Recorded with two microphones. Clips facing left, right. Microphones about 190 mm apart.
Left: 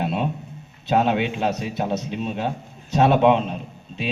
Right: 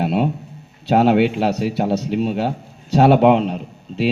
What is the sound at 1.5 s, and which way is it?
Speech, 70° right (ahead or behind).